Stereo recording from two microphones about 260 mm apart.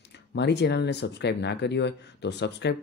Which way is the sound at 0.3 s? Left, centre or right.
Left.